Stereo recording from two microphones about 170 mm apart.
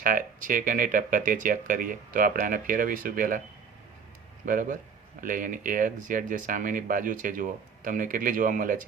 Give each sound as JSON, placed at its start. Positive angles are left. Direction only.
{"t": 0.0, "sound": "speech", "side_deg": -55}
{"t": 4.4, "sound": "speech", "side_deg": -50}